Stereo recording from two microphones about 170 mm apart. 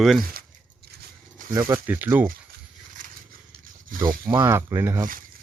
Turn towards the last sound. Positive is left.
turn(degrees=-15)  # may be behind; listen again after turning